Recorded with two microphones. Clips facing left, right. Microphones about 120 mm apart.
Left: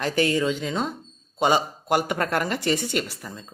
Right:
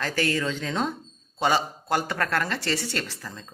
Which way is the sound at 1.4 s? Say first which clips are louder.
Left 3 dB; 20° left (ahead or behind).